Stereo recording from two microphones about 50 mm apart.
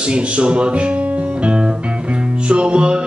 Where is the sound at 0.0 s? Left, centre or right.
Right.